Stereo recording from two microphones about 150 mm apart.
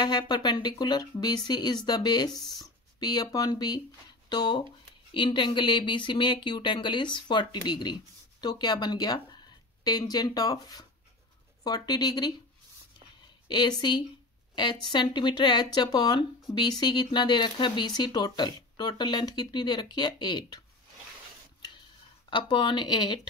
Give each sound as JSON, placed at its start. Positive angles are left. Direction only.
{"t": 0.0, "sound": "speech", "side_deg": 30}
{"t": 13.5, "sound": "speech", "side_deg": 30}
{"t": 22.3, "sound": "speech", "side_deg": 30}